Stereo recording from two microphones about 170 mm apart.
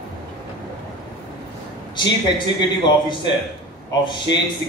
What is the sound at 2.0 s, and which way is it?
A man's voice, 25° left (ahead or behind).